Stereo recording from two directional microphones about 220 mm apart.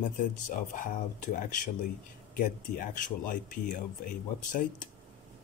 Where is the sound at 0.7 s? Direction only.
35° left (ahead or behind).